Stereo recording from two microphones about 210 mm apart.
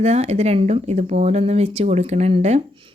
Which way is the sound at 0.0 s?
30° right (ahead or behind).